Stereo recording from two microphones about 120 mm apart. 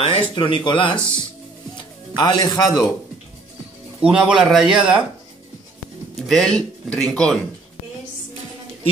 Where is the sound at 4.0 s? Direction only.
10° right (ahead or behind).